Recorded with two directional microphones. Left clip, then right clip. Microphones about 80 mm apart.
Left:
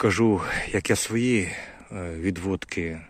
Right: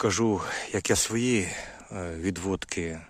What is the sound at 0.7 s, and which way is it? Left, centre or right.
Speech, right.